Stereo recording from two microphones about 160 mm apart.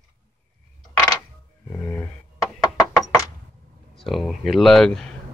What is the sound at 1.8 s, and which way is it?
Speech, 15° left (ahead or behind).